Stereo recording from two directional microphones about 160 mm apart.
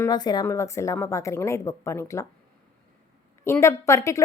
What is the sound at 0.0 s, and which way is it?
A woman's voice, 25° left (ahead or behind).